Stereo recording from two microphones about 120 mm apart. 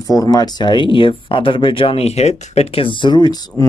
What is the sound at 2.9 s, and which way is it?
Speech, 40° left (ahead or behind).